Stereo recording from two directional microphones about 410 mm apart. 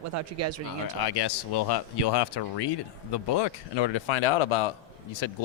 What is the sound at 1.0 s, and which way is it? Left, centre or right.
Speech, left.